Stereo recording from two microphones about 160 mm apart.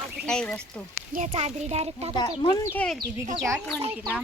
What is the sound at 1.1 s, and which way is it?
Speech, 45° right (ahead or behind).